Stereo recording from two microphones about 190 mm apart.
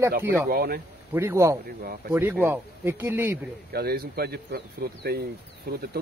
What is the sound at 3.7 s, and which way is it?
Speech, 55° right (ahead or behind).